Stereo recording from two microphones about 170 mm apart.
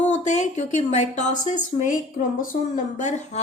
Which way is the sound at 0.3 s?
45° left (ahead or behind).